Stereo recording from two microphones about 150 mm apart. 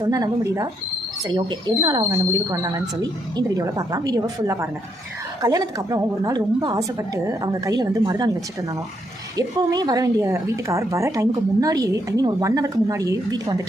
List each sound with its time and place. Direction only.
0.1 s a woman's voice: 25° right (ahead or behind)
9.6 s a woman's voice: 25° right (ahead or behind)